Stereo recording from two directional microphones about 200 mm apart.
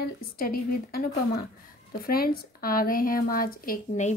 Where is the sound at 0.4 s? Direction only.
50° left (ahead or behind).